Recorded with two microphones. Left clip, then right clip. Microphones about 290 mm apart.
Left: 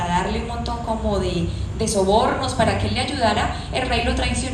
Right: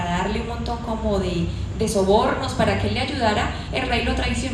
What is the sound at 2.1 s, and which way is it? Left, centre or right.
A woman's voice, left.